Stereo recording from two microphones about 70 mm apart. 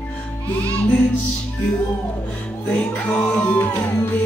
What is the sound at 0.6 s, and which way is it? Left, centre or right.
Music, centre.